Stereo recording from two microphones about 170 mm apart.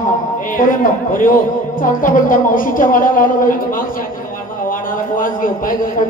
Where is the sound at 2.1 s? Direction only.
50° left (ahead or behind).